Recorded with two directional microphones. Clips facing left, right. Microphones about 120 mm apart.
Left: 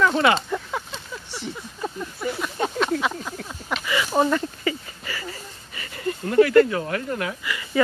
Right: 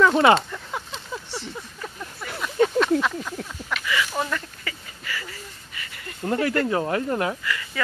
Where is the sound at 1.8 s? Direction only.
25° left (ahead or behind).